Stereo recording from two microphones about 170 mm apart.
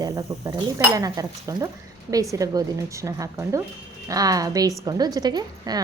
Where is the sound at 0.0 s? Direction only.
20° right (ahead or behind).